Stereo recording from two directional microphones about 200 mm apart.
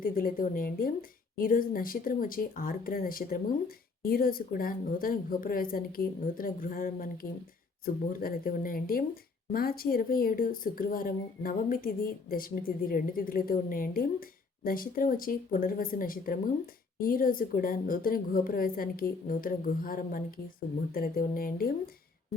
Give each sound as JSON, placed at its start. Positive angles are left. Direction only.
{"t": 0.0, "sound": "a woman's voice", "side_deg": 45}